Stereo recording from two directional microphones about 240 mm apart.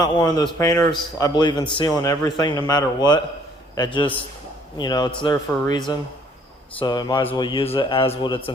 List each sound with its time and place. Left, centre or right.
0.0 s a man's voice: centre